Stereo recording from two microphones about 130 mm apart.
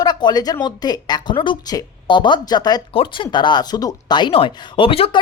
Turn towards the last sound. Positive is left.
turn(degrees=45)  # may be behind; listen again after turning